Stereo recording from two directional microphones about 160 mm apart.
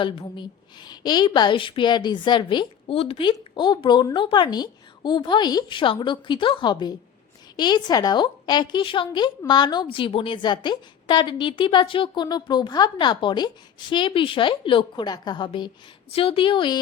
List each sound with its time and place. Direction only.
0.0 s a woman's voice: 30° left (ahead or behind)